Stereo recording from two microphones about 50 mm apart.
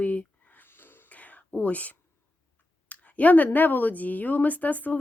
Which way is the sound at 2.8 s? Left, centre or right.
Left.